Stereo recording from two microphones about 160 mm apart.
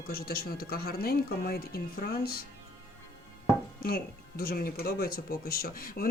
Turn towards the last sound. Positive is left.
turn(degrees=65)  # may be behind; listen again after turning